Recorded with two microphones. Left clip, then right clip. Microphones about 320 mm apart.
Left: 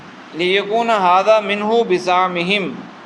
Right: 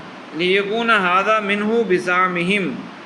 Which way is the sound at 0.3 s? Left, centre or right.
Centre.